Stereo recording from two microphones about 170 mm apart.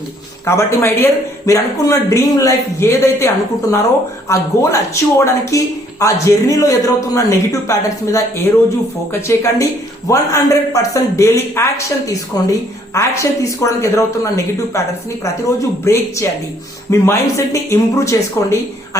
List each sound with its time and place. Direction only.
0.4 s a man's voice: 15° left (ahead or behind)
9.2 s a man's voice: 15° left (ahead or behind)